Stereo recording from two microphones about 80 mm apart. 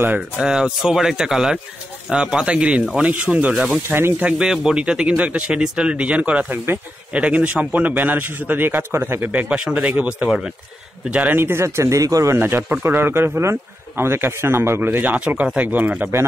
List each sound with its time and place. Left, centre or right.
0.4 s speech: centre
11.3 s speech: right
12.4 s speech: right